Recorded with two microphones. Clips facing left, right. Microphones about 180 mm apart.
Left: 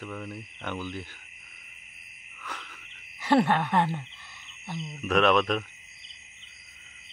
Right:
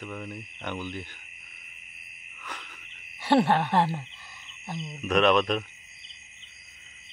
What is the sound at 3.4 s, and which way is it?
Speech, 30° right (ahead or behind).